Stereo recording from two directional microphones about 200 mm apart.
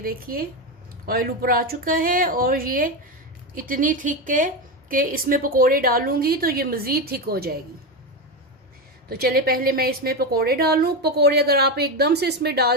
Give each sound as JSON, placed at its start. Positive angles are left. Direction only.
{"t": 0.0, "sound": "a woman's voice", "side_deg": -45}
{"t": 9.0, "sound": "a woman's voice", "side_deg": -50}